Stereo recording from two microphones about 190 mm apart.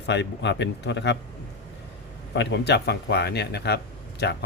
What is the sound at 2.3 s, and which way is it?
Speech, 65° left (ahead or behind).